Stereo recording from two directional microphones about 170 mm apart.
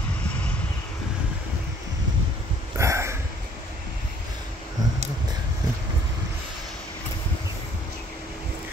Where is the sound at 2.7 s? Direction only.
15° right (ahead or behind).